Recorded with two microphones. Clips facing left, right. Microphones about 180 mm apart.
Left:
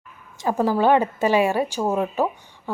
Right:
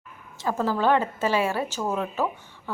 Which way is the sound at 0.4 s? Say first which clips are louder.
Left 4 dB; 15° left (ahead or behind).